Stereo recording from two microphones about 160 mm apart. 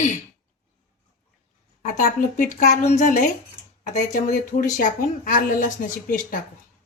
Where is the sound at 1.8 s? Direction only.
55° left (ahead or behind).